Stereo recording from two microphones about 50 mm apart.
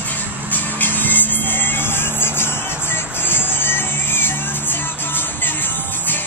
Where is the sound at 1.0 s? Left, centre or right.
Left.